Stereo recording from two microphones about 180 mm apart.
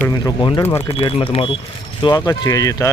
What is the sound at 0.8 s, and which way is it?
Speech, 30° left (ahead or behind).